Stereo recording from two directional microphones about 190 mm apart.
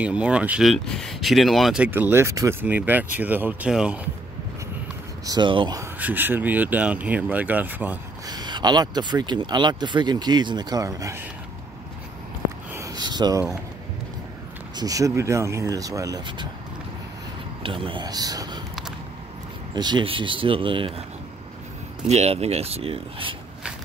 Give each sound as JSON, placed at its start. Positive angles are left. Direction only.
{"t": 0.0, "sound": "speech", "side_deg": -5}
{"t": 5.2, "sound": "speech", "side_deg": -20}
{"t": 5.9, "sound": "speech", "side_deg": -10}
{"t": 8.3, "sound": "speech", "side_deg": -20}
{"t": 12.7, "sound": "a sound", "side_deg": -20}
{"t": 14.8, "sound": "speech", "side_deg": -15}
{"t": 17.6, "sound": "speech", "side_deg": -25}
{"t": 19.7, "sound": "speech", "side_deg": -20}
{"t": 22.0, "sound": "speech", "side_deg": -35}